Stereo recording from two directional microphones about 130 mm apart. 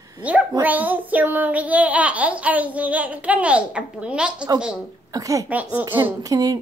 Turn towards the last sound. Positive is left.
turn(degrees=-25)  # may be behind; listen again after turning